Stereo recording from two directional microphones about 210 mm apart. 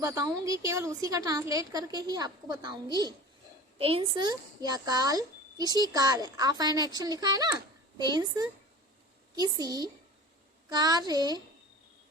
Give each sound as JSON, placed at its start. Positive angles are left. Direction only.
{"t": 0.0, "sound": "a woman's voice", "side_deg": -15}